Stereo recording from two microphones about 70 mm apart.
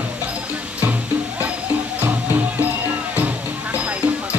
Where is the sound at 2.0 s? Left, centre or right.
Right.